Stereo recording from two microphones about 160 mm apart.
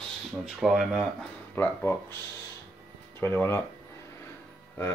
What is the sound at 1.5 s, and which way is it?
Speech, 15° left (ahead or behind).